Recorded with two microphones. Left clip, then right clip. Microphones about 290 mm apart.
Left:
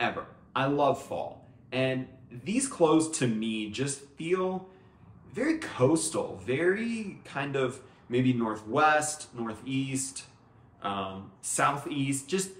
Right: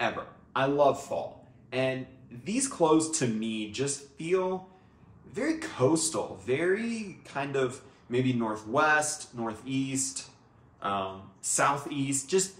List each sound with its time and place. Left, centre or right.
0.0 s speech: centre